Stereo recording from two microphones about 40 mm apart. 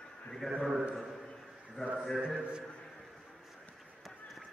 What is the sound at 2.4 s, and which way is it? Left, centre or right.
Speech, right.